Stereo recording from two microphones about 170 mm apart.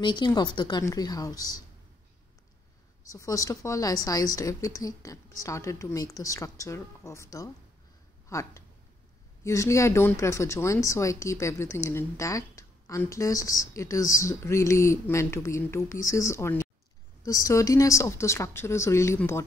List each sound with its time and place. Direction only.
0.0 s speech: 25° left (ahead or behind)
3.1 s speech: 20° left (ahead or behind)